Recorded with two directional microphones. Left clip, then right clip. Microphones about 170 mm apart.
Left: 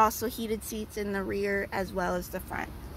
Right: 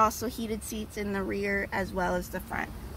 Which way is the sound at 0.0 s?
55° left (ahead or behind).